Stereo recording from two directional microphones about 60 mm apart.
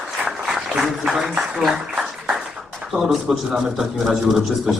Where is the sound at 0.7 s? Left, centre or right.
Centre.